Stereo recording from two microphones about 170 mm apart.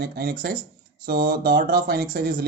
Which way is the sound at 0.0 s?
65° right (ahead or behind).